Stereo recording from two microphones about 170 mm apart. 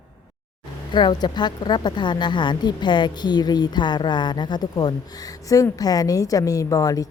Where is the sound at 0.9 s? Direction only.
25° left (ahead or behind).